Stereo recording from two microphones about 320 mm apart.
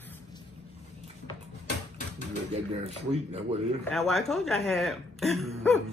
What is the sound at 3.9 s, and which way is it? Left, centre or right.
Speech, centre.